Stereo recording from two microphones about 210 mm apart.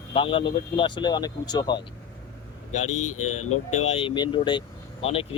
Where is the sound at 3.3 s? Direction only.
90° left.